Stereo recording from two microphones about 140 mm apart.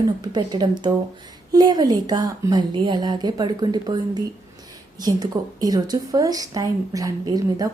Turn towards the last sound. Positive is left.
turn(degrees=-25)  # may be behind; listen again after turning